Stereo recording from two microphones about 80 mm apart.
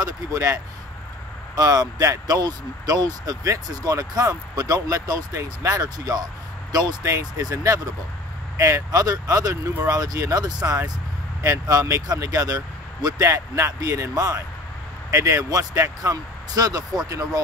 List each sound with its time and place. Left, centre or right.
0.3 s speech: right